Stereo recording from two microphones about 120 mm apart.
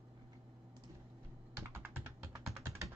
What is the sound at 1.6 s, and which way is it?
Computer keyboard, 20° right (ahead or behind).